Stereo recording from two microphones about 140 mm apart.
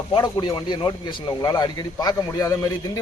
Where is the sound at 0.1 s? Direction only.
30° left (ahead or behind).